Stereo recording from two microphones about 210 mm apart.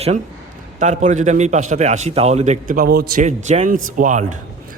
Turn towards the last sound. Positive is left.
turn(degrees=-35)  # may be behind; listen again after turning